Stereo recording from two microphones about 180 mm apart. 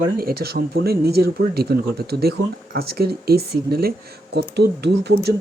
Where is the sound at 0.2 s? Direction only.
55° right (ahead or behind).